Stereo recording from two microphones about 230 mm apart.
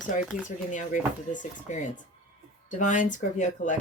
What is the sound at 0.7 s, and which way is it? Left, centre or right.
A woman's voice, left.